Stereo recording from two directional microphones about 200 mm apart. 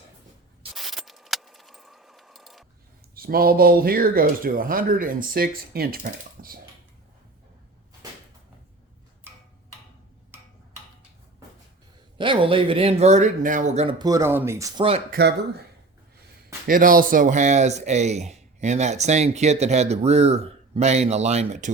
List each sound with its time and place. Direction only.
0.8 s keys jangling: centre (ahead or behind)
3.2 s speech: 50° right (ahead or behind)
12.1 s speech: 25° right (ahead or behind)
14.0 s speech: 15° right (ahead or behind)
15.2 s speech: 50° right (ahead or behind)
16.6 s speech: 45° right (ahead or behind)